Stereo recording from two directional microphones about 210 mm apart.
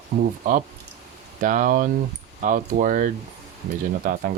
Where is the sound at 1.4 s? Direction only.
40° right (ahead or behind).